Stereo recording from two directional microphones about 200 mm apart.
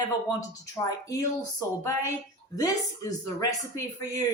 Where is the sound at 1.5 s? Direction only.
15° left (ahead or behind).